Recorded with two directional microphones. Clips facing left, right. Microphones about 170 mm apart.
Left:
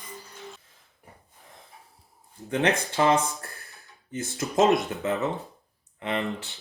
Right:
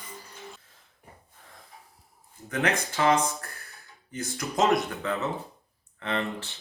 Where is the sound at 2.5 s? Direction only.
30° left (ahead or behind).